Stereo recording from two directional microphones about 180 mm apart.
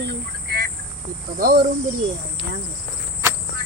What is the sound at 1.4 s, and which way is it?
Speech, 55° right (ahead or behind).